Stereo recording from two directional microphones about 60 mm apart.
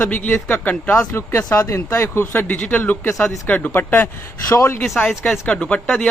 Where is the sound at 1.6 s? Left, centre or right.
Left.